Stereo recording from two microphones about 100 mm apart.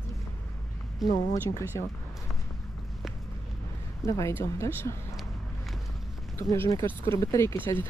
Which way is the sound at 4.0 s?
30° left (ahead or behind).